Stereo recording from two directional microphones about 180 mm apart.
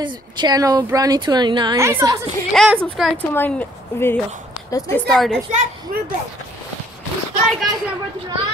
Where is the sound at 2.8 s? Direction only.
Centre (ahead or behind).